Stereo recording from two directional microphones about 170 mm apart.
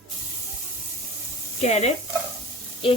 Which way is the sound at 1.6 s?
40° left (ahead or behind).